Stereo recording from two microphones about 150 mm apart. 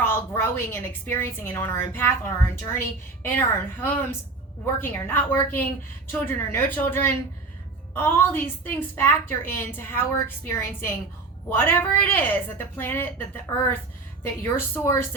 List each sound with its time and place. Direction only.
0.0 s a woman's voice: 15° left (ahead or behind)